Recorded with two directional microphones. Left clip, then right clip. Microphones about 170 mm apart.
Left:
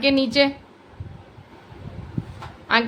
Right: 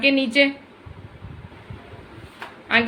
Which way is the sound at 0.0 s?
20° left (ahead or behind).